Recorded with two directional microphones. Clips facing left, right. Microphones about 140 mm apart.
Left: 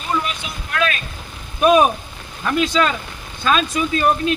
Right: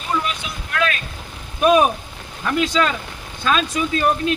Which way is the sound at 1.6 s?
20° left (ahead or behind).